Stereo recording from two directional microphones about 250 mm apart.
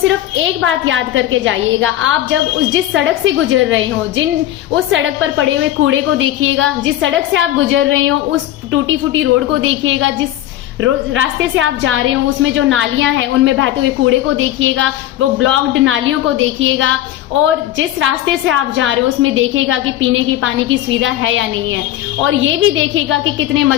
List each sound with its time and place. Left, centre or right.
0.6 s a woman's voice: right
4.9 s a woman's voice: right
23.0 s a woman's voice: right